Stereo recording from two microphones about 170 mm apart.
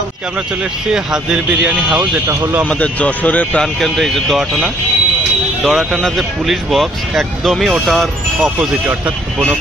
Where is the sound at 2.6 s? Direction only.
10° left (ahead or behind).